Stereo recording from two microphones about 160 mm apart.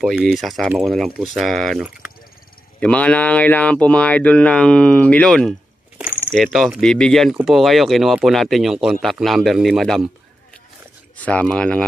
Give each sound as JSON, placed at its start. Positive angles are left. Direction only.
{"t": 0.0, "sound": "speech", "side_deg": -5}
{"t": 11.1, "sound": "speech", "side_deg": 10}